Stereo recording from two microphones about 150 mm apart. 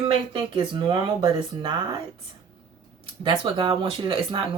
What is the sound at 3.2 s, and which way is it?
Speech, 35° right (ahead or behind).